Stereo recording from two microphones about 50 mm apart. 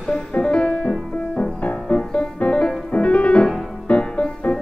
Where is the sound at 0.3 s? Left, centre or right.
Left.